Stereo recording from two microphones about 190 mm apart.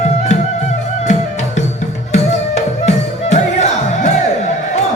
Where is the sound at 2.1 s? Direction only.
35° left (ahead or behind).